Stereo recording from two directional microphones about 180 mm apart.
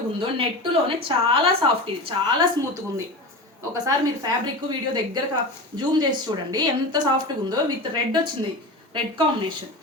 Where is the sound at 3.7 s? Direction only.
20° right (ahead or behind).